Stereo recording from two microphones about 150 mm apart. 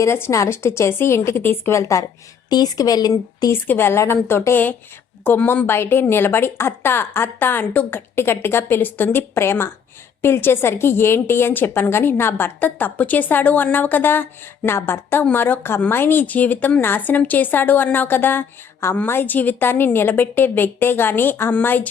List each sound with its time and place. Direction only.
0.0 s a woman's voice: 20° left (ahead or behind)